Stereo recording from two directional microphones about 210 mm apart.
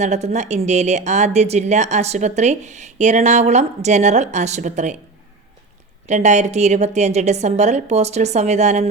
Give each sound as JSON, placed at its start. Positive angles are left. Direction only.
{"t": 0.0, "sound": "a woman's voice", "side_deg": -35}
{"t": 6.1, "sound": "a woman's voice", "side_deg": -35}